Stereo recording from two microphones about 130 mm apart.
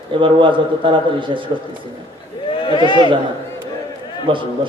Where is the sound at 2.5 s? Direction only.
40° left (ahead or behind).